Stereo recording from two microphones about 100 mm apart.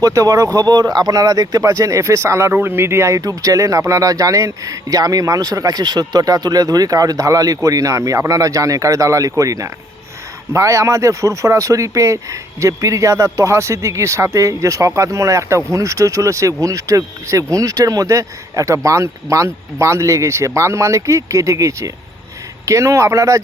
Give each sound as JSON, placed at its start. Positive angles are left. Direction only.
{"t": 0.0, "sound": "speech", "side_deg": -35}